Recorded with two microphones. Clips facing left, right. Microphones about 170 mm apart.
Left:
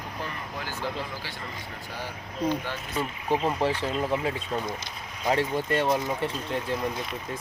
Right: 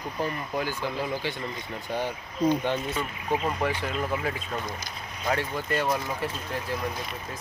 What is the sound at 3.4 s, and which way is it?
Speech, 30° left (ahead or behind).